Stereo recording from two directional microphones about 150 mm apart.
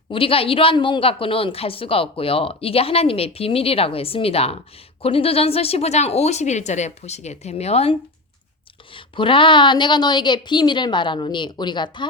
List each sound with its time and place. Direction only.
0.1 s a woman's voice: 35° left (ahead or behind)